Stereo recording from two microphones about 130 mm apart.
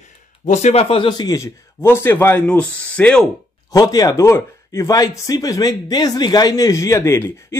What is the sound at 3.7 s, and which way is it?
Speech, 30° left (ahead or behind).